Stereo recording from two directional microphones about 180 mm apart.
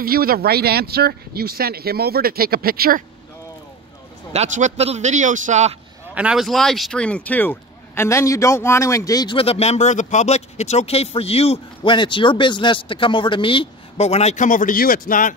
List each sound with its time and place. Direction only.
0.0 s speech: 55° right (ahead or behind)
4.3 s a man's voice: 40° right (ahead or behind)
6.1 s speech: 5° right (ahead or behind); by 15.3 s 50° left (ahead or behind)